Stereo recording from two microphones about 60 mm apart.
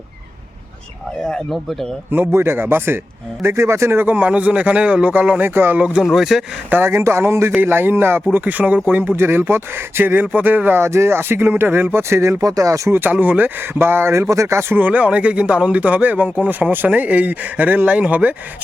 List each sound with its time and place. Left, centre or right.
2.0 s speech: right
3.4 s speech: right
4.0 s speech: right
5.4 s speech: right
6.0 s speech: centre
6.7 s speech: right
10.8 s speech: right
12.4 s speech: right
12.9 s speech: right
14.7 s speech: right